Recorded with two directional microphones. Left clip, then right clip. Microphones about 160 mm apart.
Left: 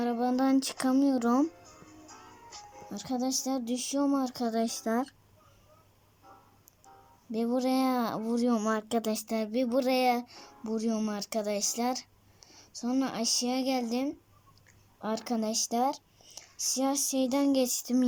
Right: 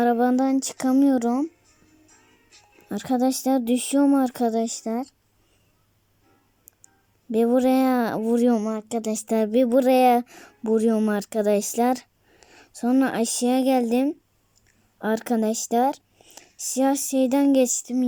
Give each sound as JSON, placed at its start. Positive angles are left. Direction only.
{"t": 0.0, "sound": "music", "side_deg": -50}
{"t": 2.0, "sound": "music", "side_deg": 0}
{"t": 2.9, "sound": "speech", "side_deg": -50}
{"t": 7.3, "sound": "speech", "side_deg": -50}
{"t": 8.6, "sound": "speech", "side_deg": -30}